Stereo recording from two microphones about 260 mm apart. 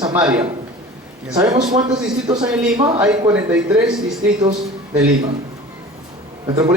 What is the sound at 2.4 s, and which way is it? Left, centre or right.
Speech, centre.